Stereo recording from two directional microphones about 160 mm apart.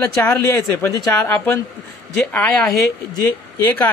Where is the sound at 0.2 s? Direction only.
15° left (ahead or behind).